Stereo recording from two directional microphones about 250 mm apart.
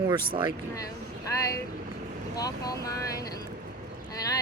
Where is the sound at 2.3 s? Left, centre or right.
Centre.